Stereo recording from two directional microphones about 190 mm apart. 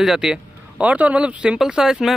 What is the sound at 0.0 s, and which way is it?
Speech, 5° right (ahead or behind).